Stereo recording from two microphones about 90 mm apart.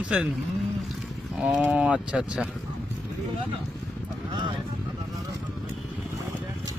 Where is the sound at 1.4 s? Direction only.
15° right (ahead or behind).